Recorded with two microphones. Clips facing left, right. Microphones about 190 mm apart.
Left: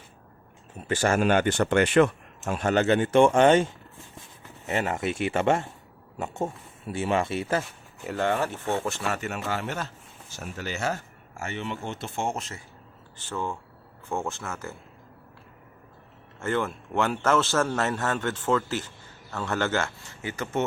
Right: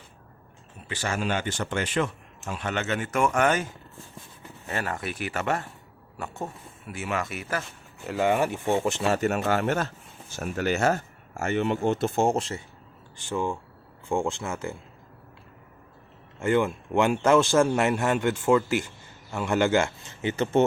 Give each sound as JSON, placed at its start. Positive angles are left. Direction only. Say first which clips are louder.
{"t": 0.9, "sound": "speech", "louder": "left 6 dB", "side_deg": 50}
{"t": 2.5, "sound": "speech", "louder": "left 7 dB", "side_deg": 45}
{"t": 8.0, "sound": "a man's voice", "louder": "right 2 dB", "side_deg": -5}
{"t": 9.2, "sound": "speech", "louder": "right 7 dB", "side_deg": -50}
{"t": 13.1, "sound": "a man's voice", "louder": "right 4 dB", "side_deg": -15}
{"t": 16.4, "sound": "a man's voice", "louder": "right 4 dB", "side_deg": -15}